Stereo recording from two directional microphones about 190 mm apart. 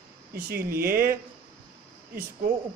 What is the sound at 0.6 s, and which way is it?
Speech, 10° right (ahead or behind).